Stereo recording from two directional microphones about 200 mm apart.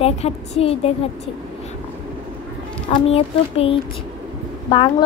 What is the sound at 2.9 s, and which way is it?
Speech, 30° left (ahead or behind).